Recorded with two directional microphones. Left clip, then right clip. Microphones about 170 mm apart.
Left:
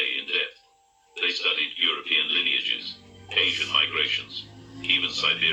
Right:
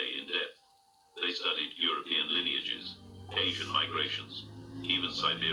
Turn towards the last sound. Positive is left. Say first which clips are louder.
# left 8 dB
turn(degrees=-30)  # may be behind; listen again after turning